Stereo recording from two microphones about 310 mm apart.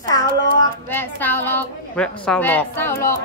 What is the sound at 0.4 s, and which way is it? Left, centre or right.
A woman's voice, centre.